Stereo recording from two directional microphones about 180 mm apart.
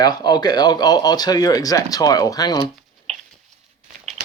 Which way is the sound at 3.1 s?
40° right (ahead or behind).